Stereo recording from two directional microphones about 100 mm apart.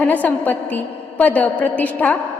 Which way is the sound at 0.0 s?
15° left (ahead or behind).